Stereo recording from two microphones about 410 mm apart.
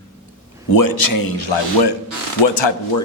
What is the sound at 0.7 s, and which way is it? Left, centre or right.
Speech, left.